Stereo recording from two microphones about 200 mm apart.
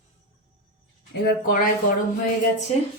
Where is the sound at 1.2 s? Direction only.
45° left (ahead or behind).